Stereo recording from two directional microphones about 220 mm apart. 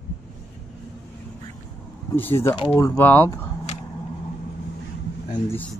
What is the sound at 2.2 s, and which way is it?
Speech, 10° left (ahead or behind).